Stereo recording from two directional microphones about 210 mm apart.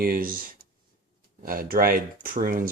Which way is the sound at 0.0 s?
45° right (ahead or behind).